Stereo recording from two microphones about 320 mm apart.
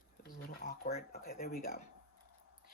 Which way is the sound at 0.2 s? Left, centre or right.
Left.